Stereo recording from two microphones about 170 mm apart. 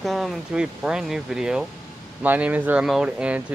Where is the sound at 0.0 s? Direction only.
Centre (ahead or behind).